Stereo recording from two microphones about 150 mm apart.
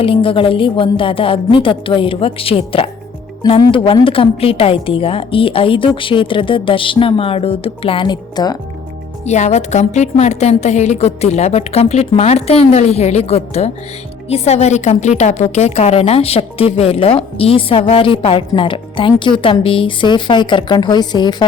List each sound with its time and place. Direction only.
0.0 s a woman's voice: 35° left (ahead or behind)
9.2 s a woman's voice: 50° left (ahead or behind); by 21.4 s 30° left (ahead or behind)